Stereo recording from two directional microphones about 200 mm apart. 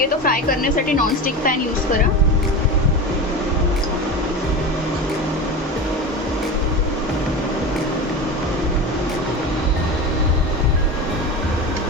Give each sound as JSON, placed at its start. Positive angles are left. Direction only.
{"t": 0.0, "sound": "a woman's voice", "side_deg": 45}